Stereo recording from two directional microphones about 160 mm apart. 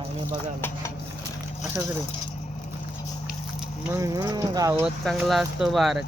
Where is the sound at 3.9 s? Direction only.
20° right (ahead or behind).